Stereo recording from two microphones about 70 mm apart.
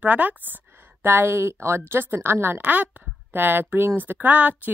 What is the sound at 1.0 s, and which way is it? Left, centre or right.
A woman's voice, right.